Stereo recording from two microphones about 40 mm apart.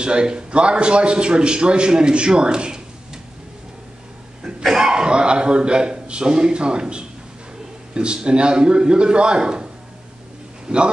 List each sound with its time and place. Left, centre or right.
0.0 s a man's voice: right
4.6 s a man's voice: centre
10.7 s a man's voice: right